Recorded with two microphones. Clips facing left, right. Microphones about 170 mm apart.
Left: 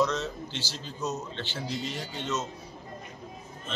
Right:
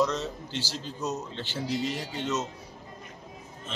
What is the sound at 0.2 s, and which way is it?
Speech, 40° right (ahead or behind).